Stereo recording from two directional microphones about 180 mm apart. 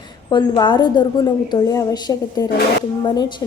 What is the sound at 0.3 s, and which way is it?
A woman's voice, 25° left (ahead or behind).